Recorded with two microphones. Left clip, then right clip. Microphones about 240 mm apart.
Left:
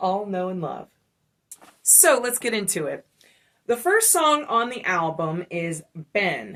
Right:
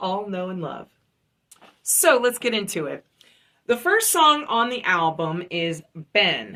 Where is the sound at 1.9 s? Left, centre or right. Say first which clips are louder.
Right 1 dB; centre.